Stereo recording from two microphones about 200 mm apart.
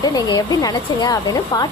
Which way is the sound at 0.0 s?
20° left (ahead or behind).